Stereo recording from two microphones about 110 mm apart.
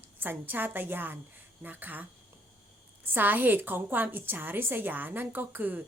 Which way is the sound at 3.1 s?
15° right (ahead or behind).